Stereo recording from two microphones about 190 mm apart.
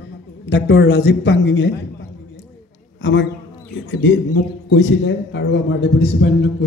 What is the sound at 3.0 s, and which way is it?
A man's voice, 75° left (ahead or behind).